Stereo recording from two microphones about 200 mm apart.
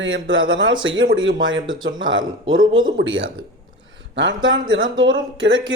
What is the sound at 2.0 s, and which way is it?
Speech, 70° right (ahead or behind).